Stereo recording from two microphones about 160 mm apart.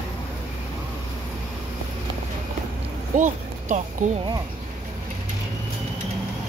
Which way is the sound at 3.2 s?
50° right (ahead or behind).